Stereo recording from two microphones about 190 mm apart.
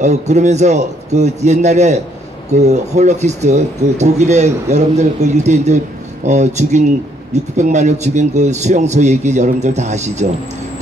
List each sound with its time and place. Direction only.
0.0 s speech: 40° right (ahead or behind)